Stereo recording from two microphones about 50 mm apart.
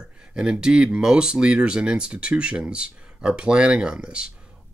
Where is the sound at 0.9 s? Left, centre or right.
Centre.